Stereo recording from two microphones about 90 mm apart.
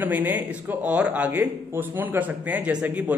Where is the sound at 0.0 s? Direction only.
20° right (ahead or behind).